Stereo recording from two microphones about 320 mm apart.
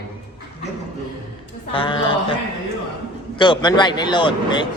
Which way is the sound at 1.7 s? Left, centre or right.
Centre.